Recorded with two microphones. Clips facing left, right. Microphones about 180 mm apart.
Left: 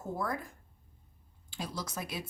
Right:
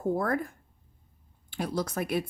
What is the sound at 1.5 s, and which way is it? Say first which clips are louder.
Speech: right 8 dB; 60° right (ahead or behind).